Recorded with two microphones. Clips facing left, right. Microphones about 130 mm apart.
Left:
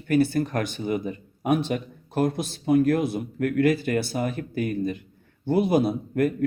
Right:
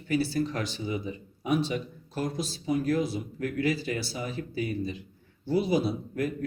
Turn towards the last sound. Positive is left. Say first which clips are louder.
# left 6 dB
turn(degrees=55)  # may be behind; listen again after turning